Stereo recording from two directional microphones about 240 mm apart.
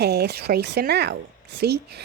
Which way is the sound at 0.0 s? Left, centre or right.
Right.